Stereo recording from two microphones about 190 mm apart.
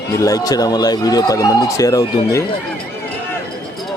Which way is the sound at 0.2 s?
20° left (ahead or behind).